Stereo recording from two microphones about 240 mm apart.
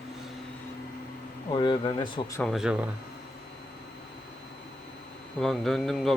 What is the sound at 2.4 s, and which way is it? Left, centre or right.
Speech, centre.